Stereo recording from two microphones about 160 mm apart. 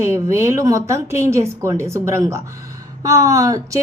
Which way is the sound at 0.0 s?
15° right (ahead or behind).